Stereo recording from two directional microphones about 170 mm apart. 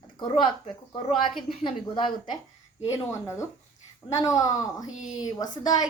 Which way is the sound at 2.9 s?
15° left (ahead or behind).